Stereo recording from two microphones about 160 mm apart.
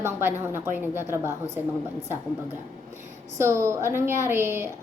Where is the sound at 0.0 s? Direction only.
15° right (ahead or behind).